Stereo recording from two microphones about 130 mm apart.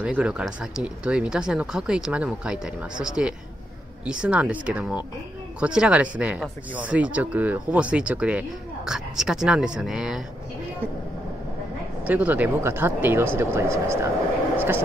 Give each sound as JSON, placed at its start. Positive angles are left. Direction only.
{"t": 0.0, "sound": "speech", "side_deg": -10}
{"t": 12.0, "sound": "speech", "side_deg": -10}